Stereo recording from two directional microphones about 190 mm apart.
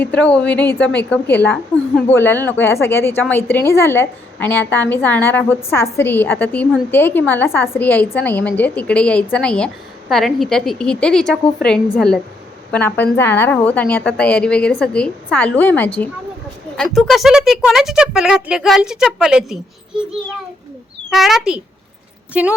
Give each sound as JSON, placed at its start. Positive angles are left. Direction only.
{"t": 0.0, "sound": "a woman's voice", "side_deg": 5}